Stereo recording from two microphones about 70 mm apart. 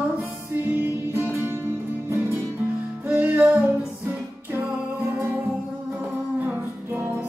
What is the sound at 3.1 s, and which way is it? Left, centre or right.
Music, right.